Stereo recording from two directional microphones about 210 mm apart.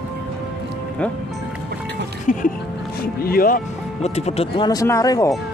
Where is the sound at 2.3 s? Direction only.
40° left (ahead or behind).